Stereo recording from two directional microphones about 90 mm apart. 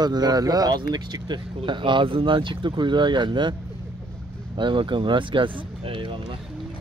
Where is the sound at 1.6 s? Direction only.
70° right (ahead or behind).